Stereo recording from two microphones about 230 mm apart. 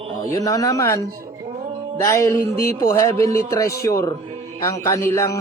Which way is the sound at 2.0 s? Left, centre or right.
Centre.